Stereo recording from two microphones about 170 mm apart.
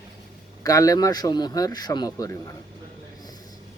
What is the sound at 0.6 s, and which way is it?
Speech, 20° left (ahead or behind).